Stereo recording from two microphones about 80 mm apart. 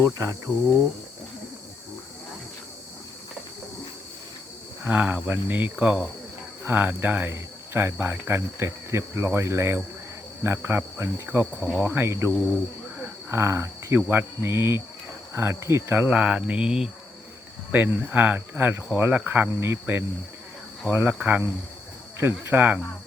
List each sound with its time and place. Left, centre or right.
0.2 s cricket: right
4.9 s speech: centre
6.7 s cricket: right
11.3 s speech: right
12.0 s cricket: right
13.3 s cricket: right
16.0 s mantra: centre
17.7 s speech: right
19.5 s speech: right
22.2 s speech: right